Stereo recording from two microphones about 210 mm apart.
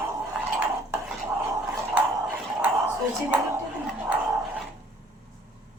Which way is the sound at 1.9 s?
5° right (ahead or behind).